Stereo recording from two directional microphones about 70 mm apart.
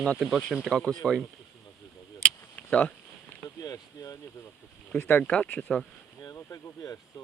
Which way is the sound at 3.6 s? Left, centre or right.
Left.